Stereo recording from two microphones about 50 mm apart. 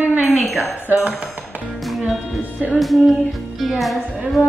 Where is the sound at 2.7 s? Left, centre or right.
Centre.